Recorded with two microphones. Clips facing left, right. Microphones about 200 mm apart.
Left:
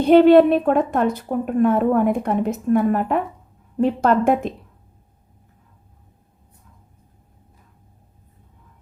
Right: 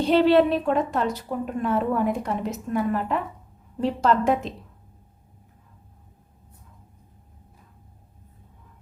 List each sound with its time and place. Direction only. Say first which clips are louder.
0.0 s a woman's voice: left 7 dB; 55° left (ahead or behind)